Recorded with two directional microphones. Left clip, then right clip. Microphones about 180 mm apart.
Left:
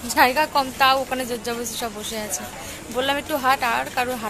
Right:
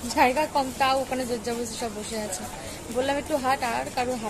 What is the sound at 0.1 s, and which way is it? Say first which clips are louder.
A woman's voice: left 4 dB; 5° left (ahead or behind).